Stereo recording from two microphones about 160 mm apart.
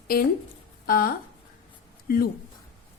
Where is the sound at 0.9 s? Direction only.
65° left (ahead or behind).